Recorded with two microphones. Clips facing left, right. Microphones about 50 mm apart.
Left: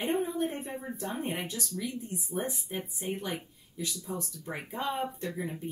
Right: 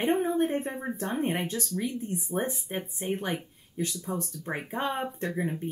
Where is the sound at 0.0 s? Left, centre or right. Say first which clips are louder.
Right 5 dB; right.